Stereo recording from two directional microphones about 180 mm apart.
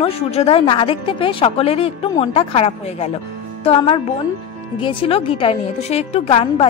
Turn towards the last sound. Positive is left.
turn(degrees=35)  # may be behind; listen again after turning